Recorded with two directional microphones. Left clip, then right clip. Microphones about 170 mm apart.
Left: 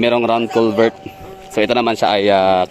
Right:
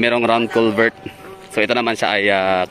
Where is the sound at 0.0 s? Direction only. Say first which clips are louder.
Left 1 dB; 20° left (ahead or behind).